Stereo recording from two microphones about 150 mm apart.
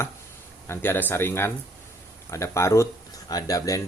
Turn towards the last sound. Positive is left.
turn(degrees=20)  # may be behind; listen again after turning